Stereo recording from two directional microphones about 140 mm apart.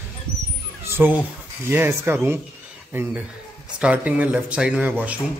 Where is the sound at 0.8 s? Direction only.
15° right (ahead or behind).